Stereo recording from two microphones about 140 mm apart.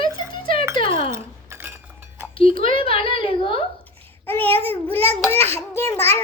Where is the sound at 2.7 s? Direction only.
40° left (ahead or behind).